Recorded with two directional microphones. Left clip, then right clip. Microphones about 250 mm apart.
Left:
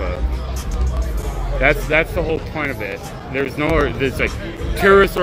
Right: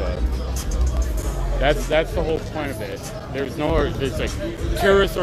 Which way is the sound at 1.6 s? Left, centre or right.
Left.